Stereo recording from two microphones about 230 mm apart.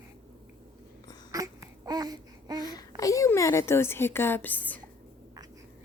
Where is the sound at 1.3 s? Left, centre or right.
Centre.